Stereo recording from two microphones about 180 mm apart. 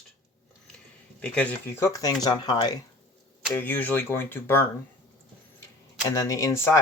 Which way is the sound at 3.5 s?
10° left (ahead or behind).